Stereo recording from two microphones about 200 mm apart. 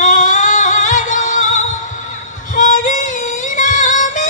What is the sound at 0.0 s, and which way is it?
Music, 40° left (ahead or behind).